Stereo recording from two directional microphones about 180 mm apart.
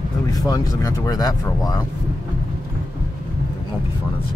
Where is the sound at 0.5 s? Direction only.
15° left (ahead or behind).